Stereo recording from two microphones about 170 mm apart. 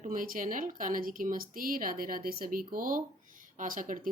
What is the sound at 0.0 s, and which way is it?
Speech, 55° right (ahead or behind).